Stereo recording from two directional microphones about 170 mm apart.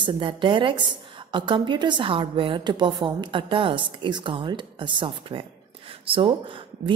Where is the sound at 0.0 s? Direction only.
30° right (ahead or behind).